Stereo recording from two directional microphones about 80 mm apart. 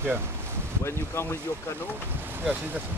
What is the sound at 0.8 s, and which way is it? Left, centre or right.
Speech, left.